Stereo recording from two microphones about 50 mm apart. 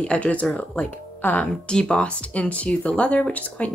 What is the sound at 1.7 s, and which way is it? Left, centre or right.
Speech, centre.